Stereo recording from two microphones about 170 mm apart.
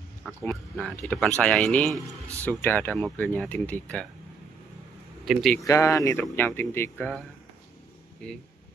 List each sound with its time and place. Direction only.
0.4 s speech: 5° left (ahead or behind)
2.0 s speech: 20° right (ahead or behind)
2.4 s speech: 10° left (ahead or behind)
5.2 s speech: centre (ahead or behind)
5.6 s speech: 20° left (ahead or behind)